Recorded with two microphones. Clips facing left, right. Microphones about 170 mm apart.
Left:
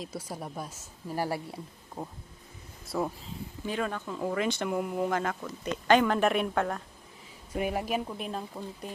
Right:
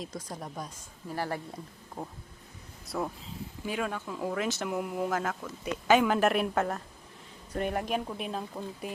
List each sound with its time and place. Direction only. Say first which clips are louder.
0.0 s a woman's voice: left 1 dB; 5° left (ahead or behind)
2.8 s speech: left 2 dB; centre (ahead or behind)